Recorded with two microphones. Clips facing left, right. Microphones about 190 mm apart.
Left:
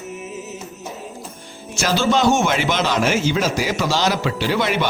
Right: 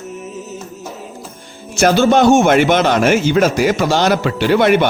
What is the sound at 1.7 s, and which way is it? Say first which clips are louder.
A man's voice: right 7 dB; 55° right (ahead or behind).